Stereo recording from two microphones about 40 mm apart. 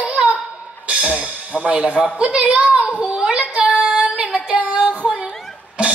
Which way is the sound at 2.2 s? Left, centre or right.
Right.